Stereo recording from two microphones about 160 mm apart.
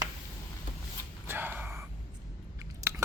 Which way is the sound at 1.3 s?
15° right (ahead or behind).